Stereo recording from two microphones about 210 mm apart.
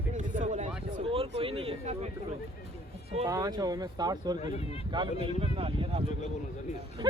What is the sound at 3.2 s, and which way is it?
Speech, 15° right (ahead or behind).